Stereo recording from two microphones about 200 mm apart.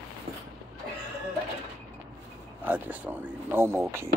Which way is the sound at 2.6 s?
10° right (ahead or behind).